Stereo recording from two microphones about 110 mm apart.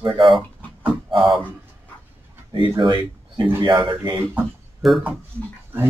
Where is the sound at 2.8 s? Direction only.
45° right (ahead or behind).